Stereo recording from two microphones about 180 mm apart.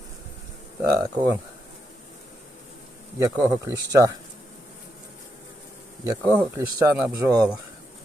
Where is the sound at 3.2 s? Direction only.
20° right (ahead or behind).